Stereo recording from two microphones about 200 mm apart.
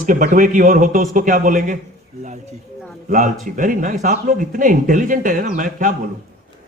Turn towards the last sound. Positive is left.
turn(degrees=-40)  # may be behind; listen again after turning